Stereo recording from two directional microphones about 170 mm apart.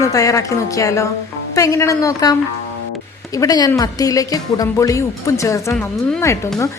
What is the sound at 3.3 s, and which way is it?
A woman's voice, 20° left (ahead or behind).